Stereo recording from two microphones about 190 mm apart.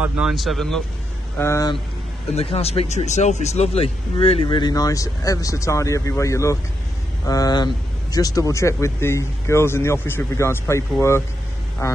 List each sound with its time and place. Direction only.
0.0 s speech: centre (ahead or behind)
1.4 s speech: 15° left (ahead or behind)
2.3 s speech: 30° left (ahead or behind); by 12.0 s 15° left (ahead or behind)